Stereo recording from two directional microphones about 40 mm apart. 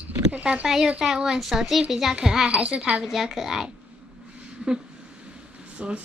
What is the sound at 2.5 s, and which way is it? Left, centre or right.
Speech, right.